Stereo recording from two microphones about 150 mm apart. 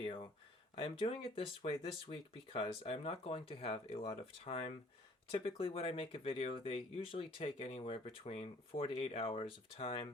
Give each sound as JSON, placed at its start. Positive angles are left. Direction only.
{"t": 0.8, "sound": "speech", "side_deg": 40}